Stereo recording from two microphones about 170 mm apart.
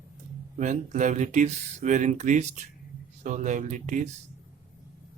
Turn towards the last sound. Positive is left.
turn(degrees=-45)  # may be behind; listen again after turning